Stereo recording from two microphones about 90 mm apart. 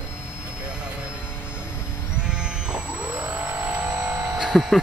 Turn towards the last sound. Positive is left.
turn(degrees=-5)  # may be behind; listen again after turning